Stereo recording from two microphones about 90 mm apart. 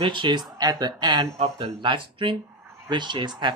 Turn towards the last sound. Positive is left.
turn(degrees=-55)  # may be behind; listen again after turning